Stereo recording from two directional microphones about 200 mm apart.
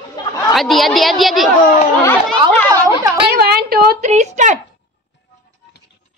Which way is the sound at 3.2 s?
50° right (ahead or behind).